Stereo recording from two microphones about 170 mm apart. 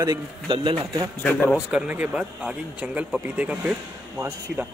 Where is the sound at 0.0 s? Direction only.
25° right (ahead or behind).